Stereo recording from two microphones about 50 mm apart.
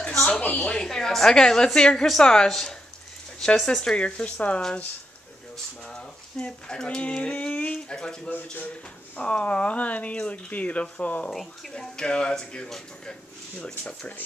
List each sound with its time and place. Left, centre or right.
0.1 s a sound: centre
0.4 s speech: left
0.7 s a woman's voice: centre
5.9 s a woman's voice: centre
8.3 s speech: left
9.2 s speech: left
11.2 s a woman's voice: centre
12.6 s a woman's voice: centre
13.6 s a woman's voice: centre